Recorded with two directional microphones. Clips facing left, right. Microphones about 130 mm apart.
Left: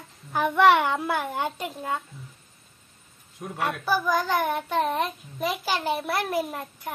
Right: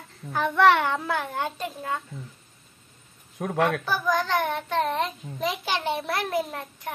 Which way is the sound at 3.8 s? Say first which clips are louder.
Left 1 dB; 10° left (ahead or behind).